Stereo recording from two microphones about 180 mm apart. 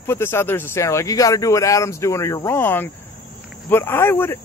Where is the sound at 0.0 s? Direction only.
15° left (ahead or behind).